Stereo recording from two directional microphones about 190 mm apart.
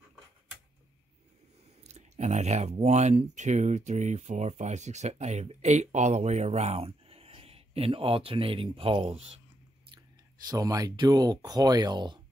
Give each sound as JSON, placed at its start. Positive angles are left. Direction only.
{"t": 1.8, "sound": "speech", "side_deg": -35}
{"t": 10.4, "sound": "speech", "side_deg": -20}